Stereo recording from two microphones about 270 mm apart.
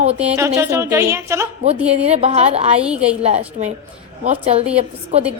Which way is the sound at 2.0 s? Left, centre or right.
Right.